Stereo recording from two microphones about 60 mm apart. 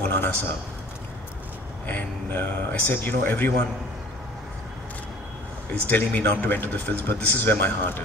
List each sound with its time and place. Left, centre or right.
0.0 s a man's voice: left
1.9 s speech: left
5.7 s speech: left